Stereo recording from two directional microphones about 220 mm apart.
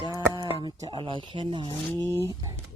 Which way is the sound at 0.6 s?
20° right (ahead or behind).